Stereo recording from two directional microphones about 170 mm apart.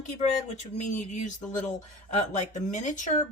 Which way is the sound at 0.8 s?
45° left (ahead or behind).